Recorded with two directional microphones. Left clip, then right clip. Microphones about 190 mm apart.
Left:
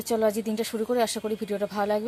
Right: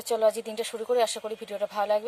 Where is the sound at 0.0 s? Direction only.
5° right (ahead or behind).